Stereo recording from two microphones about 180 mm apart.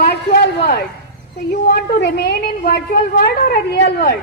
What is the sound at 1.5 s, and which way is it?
A woman's voice, 65° left (ahead or behind).